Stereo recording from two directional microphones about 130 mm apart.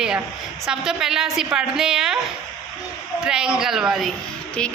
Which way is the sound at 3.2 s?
5° right (ahead or behind).